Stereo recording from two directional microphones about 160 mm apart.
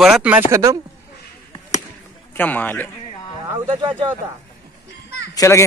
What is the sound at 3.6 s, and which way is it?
Speech, 30° right (ahead or behind).